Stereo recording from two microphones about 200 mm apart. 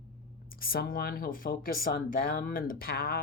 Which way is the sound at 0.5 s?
45° left (ahead or behind).